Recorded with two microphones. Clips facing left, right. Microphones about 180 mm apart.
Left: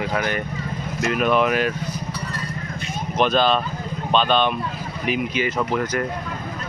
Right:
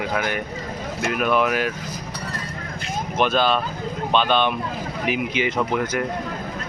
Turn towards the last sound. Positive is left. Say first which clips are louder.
# even
turn(degrees=-10)  # may be behind; listen again after turning